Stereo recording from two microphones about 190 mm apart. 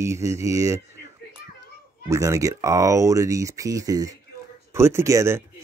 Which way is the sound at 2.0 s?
15° right (ahead or behind).